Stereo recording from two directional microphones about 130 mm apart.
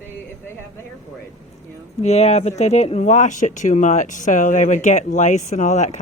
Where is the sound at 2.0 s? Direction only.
55° left (ahead or behind).